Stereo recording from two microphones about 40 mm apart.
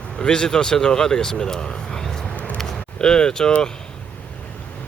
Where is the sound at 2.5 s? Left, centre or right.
Centre.